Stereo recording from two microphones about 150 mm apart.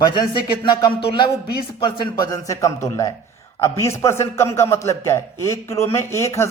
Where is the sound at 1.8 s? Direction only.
30° left (ahead or behind).